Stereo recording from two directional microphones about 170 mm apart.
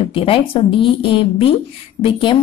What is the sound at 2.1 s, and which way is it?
Speech, 30° left (ahead or behind).